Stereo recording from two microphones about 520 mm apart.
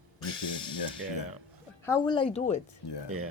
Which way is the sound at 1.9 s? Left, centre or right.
Centre.